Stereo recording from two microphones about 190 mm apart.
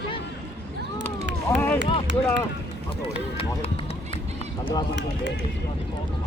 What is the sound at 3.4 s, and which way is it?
Run, 30° left (ahead or behind).